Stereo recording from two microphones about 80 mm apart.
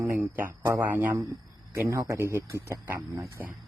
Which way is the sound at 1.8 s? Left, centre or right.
Right.